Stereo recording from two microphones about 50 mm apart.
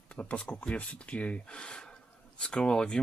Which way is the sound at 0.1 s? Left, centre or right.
Left.